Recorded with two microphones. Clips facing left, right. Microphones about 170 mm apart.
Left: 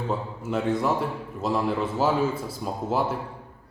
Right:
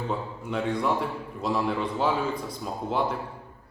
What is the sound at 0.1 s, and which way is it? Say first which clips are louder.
A man's voice: left 3 dB; 5° left (ahead or behind).